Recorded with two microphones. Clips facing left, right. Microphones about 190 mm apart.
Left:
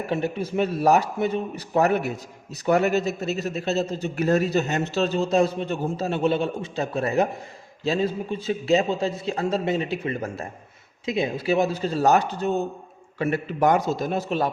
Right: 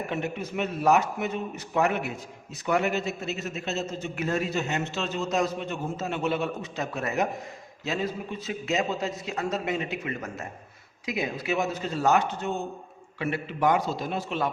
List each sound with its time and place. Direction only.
0.1 s a man's voice: 30° left (ahead or behind)